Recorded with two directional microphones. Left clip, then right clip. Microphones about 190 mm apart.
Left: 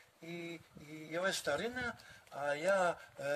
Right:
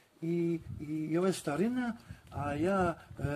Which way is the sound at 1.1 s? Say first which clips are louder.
Right 2 dB; 25° left (ahead or behind).